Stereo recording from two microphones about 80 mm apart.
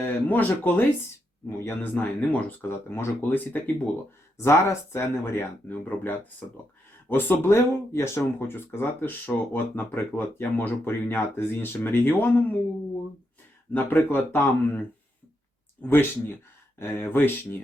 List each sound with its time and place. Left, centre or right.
0.0 s speech: left
1.5 s speech: left
2.0 s speech: centre
2.6 s speech: left
4.4 s speech: left
13.7 s speech: left